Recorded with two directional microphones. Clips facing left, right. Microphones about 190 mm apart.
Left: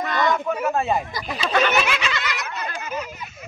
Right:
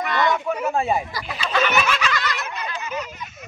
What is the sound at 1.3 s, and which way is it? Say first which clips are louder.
Speech: left 3 dB; 40° left (ahead or behind).